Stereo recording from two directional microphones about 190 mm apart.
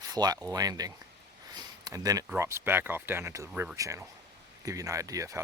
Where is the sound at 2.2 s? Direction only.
10° right (ahead or behind).